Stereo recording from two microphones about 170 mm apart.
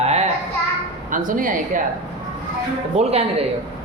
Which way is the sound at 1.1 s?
50° right (ahead or behind).